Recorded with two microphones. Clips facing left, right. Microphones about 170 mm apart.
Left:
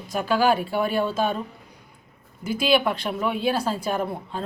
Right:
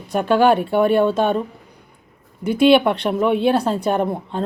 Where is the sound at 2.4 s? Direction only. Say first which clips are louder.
Right 8 dB; 65° right (ahead or behind).